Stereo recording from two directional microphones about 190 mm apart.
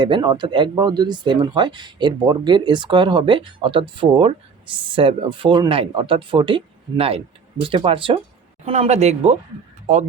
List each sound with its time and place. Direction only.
0.0 s speech: 25° right (ahead or behind)